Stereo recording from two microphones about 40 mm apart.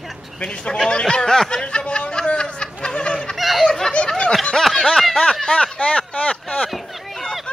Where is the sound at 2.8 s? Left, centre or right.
Left.